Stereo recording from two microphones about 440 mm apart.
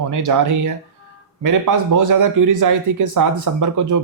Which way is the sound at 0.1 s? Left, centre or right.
Right.